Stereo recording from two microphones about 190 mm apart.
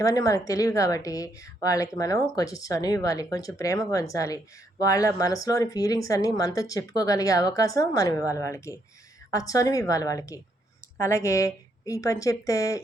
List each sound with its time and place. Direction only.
0.0 s a woman's voice: 20° left (ahead or behind)